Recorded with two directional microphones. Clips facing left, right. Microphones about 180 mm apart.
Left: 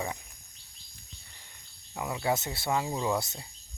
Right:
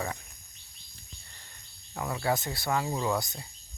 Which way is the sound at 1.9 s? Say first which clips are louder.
Even; 15° left (ahead or behind).